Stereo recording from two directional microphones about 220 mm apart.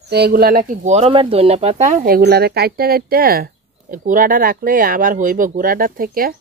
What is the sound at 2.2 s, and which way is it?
Speech, 45° right (ahead or behind).